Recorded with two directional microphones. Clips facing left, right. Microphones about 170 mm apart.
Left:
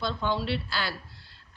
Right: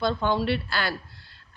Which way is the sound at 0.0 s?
55° right (ahead or behind).